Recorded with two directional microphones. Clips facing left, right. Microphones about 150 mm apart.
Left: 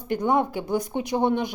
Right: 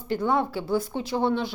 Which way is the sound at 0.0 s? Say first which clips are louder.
Left 2 dB; 15° left (ahead or behind).